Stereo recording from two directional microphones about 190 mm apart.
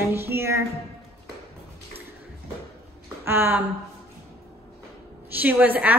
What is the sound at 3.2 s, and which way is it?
Speech, 10° right (ahead or behind).